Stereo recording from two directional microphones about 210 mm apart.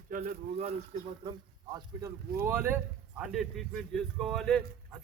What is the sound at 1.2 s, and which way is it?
Speech, 20° right (ahead or behind).